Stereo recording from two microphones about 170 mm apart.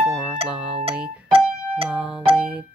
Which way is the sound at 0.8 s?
35° right (ahead or behind).